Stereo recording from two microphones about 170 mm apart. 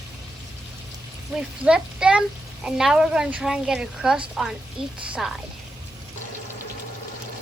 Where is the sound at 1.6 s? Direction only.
5° right (ahead or behind).